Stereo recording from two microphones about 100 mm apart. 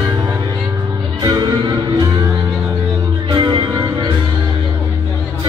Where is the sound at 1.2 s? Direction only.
45° right (ahead or behind).